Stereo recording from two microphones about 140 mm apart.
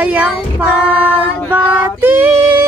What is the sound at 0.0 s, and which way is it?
Child singing, 10° right (ahead or behind).